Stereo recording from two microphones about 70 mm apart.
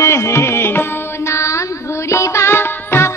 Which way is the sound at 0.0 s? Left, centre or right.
Left.